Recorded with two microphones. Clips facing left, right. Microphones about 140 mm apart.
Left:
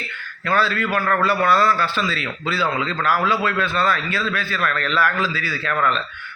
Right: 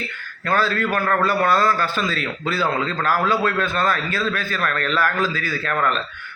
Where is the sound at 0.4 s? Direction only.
45° right (ahead or behind).